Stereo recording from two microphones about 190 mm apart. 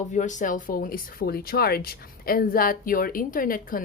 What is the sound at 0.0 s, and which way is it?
Speech, 40° left (ahead or behind).